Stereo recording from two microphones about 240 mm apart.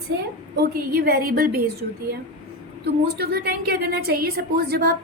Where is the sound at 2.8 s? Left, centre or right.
Right.